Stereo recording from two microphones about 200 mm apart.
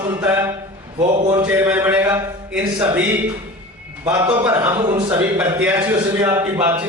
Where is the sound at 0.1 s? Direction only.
10° right (ahead or behind).